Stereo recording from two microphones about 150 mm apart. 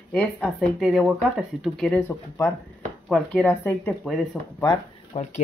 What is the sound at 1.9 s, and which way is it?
Speech, 15° left (ahead or behind).